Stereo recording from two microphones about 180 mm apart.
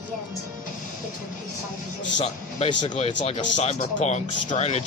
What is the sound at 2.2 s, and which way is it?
Speech, 35° left (ahead or behind).